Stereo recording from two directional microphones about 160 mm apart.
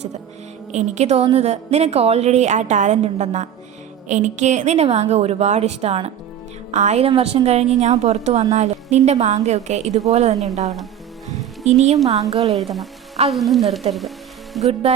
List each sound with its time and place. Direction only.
0.7 s a woman's voice: 45° right (ahead or behind)
12.3 s music: 40° right (ahead or behind)
12.5 s frying: centre (ahead or behind)
14.7 s music: 35° right (ahead or behind)